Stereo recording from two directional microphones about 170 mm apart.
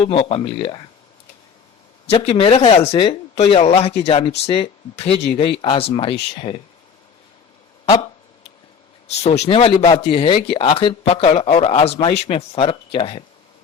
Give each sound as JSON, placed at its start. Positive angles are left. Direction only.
{"t": 0.0, "sound": "a man's voice", "side_deg": 35}
{"t": 2.1, "sound": "a man's voice", "side_deg": 35}
{"t": 9.4, "sound": "a man's voice", "side_deg": 35}